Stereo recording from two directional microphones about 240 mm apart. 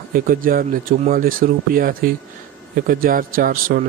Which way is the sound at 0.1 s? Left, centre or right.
Right.